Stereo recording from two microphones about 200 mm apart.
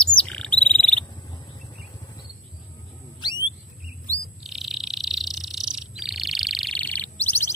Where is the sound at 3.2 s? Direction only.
20° left (ahead or behind).